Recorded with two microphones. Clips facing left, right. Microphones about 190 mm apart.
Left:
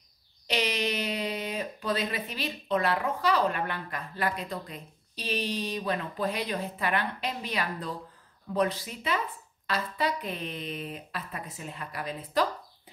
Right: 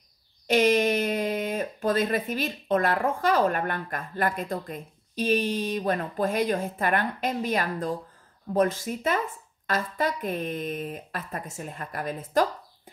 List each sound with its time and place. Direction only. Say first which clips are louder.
0.5 s speech: right 9 dB; 50° right (ahead or behind)